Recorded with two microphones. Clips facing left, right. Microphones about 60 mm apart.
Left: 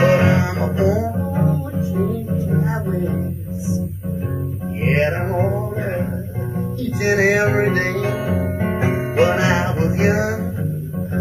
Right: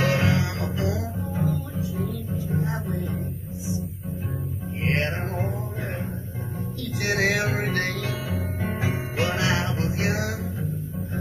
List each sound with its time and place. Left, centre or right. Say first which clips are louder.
0.0 s music: left 8 dB; left
4.8 s music: left 8 dB; left